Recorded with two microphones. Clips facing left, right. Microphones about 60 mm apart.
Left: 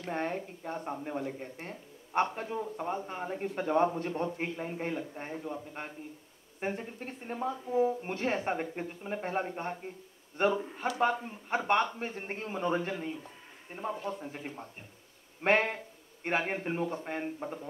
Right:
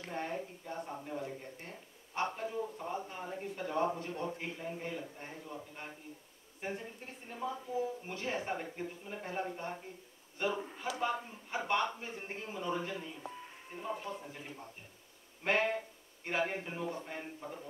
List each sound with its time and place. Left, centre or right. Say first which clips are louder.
0.0 s a man's voice: left 5 dB; left